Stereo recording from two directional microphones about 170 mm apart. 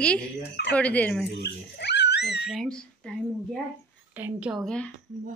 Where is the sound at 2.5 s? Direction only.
5° left (ahead or behind).